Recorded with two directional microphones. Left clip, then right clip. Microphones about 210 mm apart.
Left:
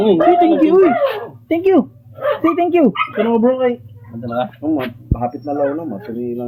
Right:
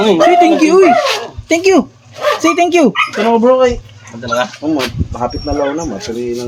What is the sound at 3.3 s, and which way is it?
Speech, 55° right (ahead or behind).